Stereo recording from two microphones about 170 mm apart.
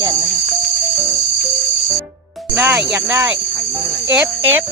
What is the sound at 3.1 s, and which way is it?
Cricket, 15° right (ahead or behind).